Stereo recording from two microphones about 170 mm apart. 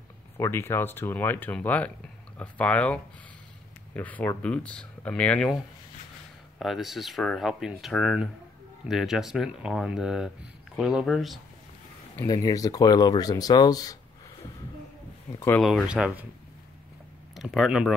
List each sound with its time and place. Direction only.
0.4 s speech: 15° left (ahead or behind)
6.6 s speech: centre (ahead or behind)
12.3 s speech: 20° left (ahead or behind)
15.3 s speech: 15° left (ahead or behind)
15.6 s speech: centre (ahead or behind)
17.4 s speech: centre (ahead or behind)